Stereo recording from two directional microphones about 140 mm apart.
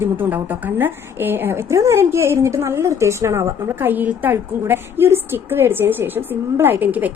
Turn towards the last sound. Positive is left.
turn(degrees=-10)  # may be behind; listen again after turning